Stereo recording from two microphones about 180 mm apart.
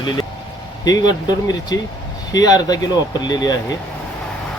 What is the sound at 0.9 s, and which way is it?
Speech, 20° left (ahead or behind).